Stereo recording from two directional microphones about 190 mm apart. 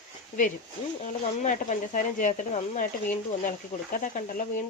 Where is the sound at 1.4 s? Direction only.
40° left (ahead or behind).